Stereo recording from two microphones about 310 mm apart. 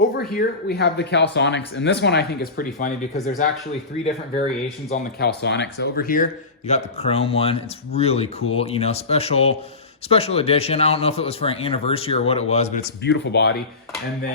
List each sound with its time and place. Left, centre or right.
0.2 s speech: left
4.9 s a man's voice: left